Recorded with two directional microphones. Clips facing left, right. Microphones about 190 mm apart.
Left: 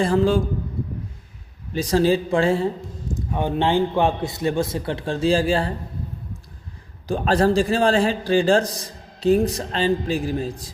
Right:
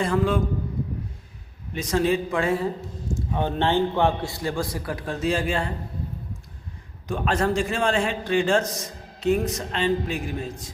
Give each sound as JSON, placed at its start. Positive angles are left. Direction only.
{"t": 0.0, "sound": "a man's voice", "side_deg": 30}
{"t": 1.7, "sound": "a man's voice", "side_deg": 35}
{"t": 3.2, "sound": "a man's voice", "side_deg": 15}
{"t": 7.1, "sound": "a man's voice", "side_deg": 35}